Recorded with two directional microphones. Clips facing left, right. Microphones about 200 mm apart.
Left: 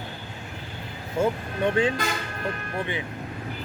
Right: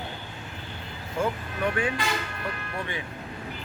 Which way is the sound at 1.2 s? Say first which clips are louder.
Left 4 dB; 25° left (ahead or behind).